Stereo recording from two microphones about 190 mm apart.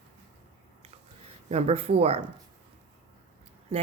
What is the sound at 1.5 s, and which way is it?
Speech, 35° right (ahead or behind).